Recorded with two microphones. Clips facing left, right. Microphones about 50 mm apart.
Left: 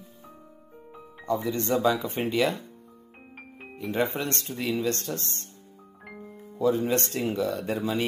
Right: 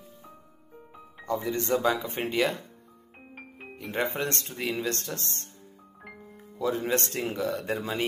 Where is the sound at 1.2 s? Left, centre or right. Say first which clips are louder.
Left 2 dB; right.